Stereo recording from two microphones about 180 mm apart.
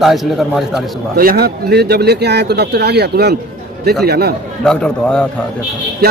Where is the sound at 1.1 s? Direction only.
55° right (ahead or behind).